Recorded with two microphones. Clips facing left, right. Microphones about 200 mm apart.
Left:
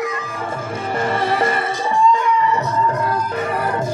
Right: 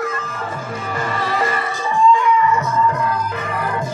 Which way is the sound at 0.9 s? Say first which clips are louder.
Left 4 dB; 30° left (ahead or behind).